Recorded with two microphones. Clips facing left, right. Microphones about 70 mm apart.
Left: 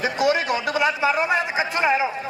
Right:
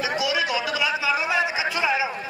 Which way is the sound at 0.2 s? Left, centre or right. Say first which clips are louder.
Left 7 dB; left.